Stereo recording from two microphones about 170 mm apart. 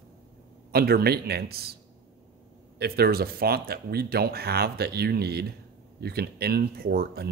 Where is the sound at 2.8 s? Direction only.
65° right (ahead or behind).